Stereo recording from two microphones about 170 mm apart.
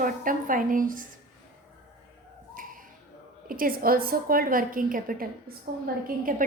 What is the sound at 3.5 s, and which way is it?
A woman's voice, 55° right (ahead or behind).